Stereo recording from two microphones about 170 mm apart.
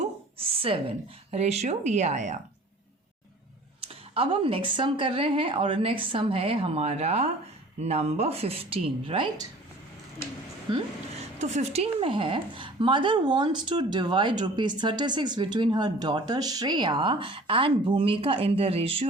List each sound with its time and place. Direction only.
0.3 s speech: 35° right (ahead or behind)
3.8 s speech: 30° right (ahead or behind)
10.7 s a woman's voice: 25° right (ahead or behind)
11.3 s a woman's voice: 40° right (ahead or behind)